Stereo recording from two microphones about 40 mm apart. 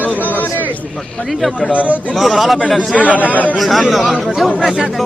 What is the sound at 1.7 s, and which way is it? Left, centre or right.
Speech, right.